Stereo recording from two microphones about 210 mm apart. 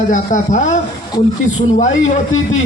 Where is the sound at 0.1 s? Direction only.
35° left (ahead or behind).